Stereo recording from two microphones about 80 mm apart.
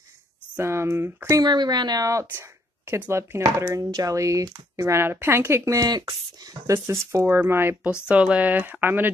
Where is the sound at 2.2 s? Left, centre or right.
Right.